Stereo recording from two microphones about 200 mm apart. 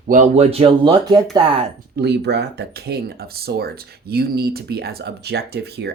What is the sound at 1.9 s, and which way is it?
Speech, 55° right (ahead or behind).